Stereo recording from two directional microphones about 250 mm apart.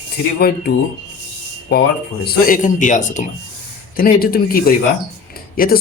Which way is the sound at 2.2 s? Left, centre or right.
Left.